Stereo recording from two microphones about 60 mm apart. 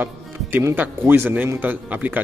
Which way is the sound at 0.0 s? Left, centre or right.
Right.